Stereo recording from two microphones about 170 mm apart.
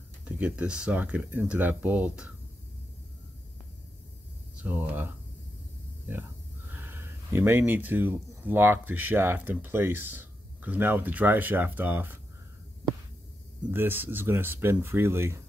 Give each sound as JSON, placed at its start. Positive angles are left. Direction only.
{"t": 0.2, "sound": "speech", "side_deg": -10}
{"t": 4.6, "sound": "speech", "side_deg": -10}
{"t": 6.7, "sound": "speech", "side_deg": -15}
{"t": 13.7, "sound": "speech", "side_deg": -10}